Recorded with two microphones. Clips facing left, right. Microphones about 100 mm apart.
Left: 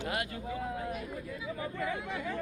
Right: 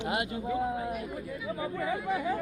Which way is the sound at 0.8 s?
10° right (ahead or behind).